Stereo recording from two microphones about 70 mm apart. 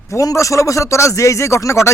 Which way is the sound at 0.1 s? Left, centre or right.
Left.